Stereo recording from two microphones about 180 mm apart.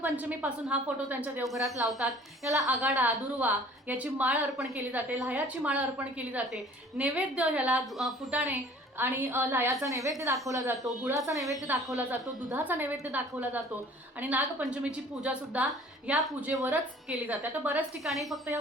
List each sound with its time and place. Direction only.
0.0 s a woman's voice: 10° right (ahead or behind)
2.4 s a woman's voice: 15° right (ahead or behind); by 18.3 s centre (ahead or behind)